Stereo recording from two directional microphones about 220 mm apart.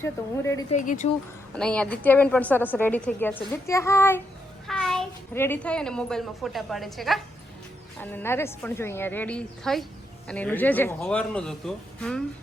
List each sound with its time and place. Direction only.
0.0 s a woman's voice: 10° left (ahead or behind)
0.8 s speech: 35° left (ahead or behind)
1.5 s a woman's voice: 5° left (ahead or behind)